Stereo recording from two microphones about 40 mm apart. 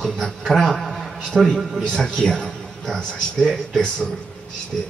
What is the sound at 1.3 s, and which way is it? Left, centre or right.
Speech, right.